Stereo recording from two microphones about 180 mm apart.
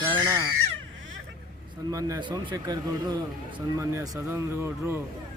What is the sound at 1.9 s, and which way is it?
Speech, 20° right (ahead or behind).